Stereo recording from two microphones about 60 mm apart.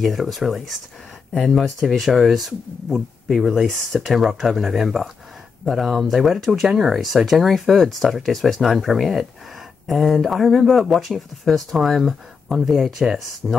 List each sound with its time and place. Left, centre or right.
0.0 s speech: centre